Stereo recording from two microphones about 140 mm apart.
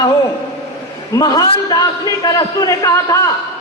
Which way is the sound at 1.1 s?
25° left (ahead or behind).